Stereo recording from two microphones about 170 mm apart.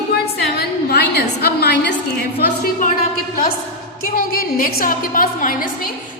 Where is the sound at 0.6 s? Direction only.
70° left (ahead or behind).